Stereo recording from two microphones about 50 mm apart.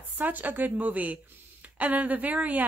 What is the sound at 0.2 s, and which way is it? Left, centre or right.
A woman's voice, right.